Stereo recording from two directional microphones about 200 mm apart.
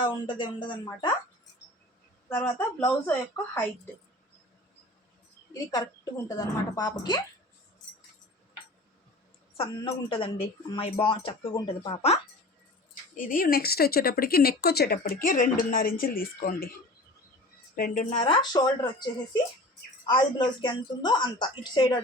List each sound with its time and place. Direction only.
0.0 s speech: 25° left (ahead or behind)
2.3 s a woman's voice: 10° left (ahead or behind)
5.5 s speech: 15° left (ahead or behind)
9.6 s speech: 25° left (ahead or behind)
13.1 s speech: 45° left (ahead or behind)
17.7 s speech: 45° left (ahead or behind)
18.2 s speech: 25° left (ahead or behind)
20.1 s speech: 20° left (ahead or behind)